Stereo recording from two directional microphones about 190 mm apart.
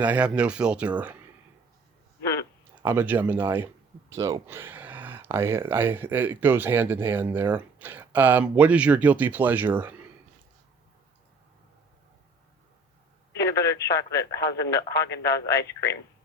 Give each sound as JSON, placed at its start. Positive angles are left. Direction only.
{"t": 0.0, "sound": "speech", "side_deg": -5}
{"t": 2.7, "sound": "speech", "side_deg": -10}
{"t": 13.3, "sound": "telephone", "side_deg": 15}
{"t": 14.3, "sound": "speech", "side_deg": 15}
{"t": 15.3, "sound": "speech", "side_deg": 60}